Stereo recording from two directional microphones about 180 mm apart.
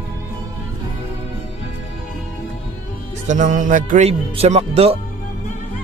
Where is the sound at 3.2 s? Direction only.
45° right (ahead or behind).